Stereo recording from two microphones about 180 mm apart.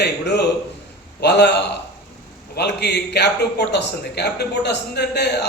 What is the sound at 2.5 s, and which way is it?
A man's voice, 70° left (ahead or behind).